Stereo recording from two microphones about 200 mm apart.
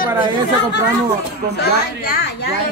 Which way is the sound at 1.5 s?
55° left (ahead or behind).